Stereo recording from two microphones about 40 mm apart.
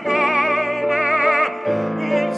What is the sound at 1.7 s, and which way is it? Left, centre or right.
Music, centre.